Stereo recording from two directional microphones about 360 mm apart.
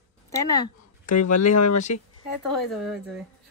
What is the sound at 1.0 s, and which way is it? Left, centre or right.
Speech, left.